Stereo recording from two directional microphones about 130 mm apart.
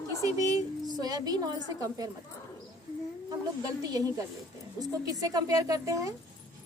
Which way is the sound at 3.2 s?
30° right (ahead or behind).